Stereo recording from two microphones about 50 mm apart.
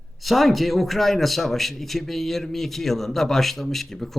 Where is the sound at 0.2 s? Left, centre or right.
Centre.